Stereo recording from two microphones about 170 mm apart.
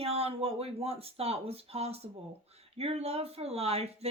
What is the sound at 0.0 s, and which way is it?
Speech, 35° right (ahead or behind).